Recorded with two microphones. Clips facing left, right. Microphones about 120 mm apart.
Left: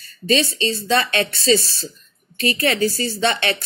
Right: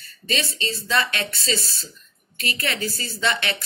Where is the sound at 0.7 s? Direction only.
60° left (ahead or behind).